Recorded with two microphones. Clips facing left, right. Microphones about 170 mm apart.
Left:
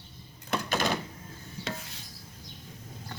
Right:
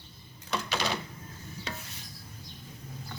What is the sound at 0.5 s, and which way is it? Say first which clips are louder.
Door: left 3 dB; 50° left (ahead or behind).